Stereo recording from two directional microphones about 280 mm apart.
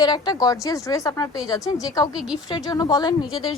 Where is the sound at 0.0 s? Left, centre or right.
Centre.